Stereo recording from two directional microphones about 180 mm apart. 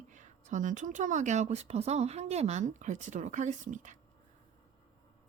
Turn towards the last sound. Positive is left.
turn(degrees=-45)  # may be behind; listen again after turning